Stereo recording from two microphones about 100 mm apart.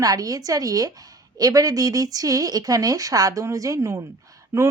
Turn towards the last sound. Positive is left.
turn(degrees=-30)  # may be behind; listen again after turning